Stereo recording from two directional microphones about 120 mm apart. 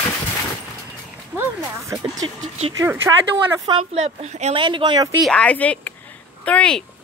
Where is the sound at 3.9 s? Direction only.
65° right (ahead or behind).